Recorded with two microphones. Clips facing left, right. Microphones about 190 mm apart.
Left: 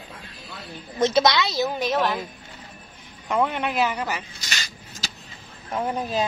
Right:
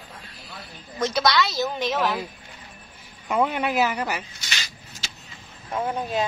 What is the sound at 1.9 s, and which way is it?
Speech, centre (ahead or behind).